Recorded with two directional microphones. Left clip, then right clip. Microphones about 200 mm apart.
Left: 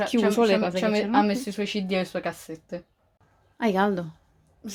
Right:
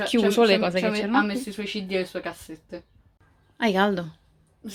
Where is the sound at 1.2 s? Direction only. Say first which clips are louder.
Left 2 dB; 55° left (ahead or behind).